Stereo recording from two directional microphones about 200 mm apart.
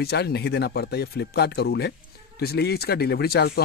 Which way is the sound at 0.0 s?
55° left (ahead or behind).